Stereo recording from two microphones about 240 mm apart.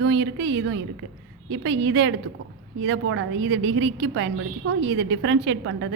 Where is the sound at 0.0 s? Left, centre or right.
Right.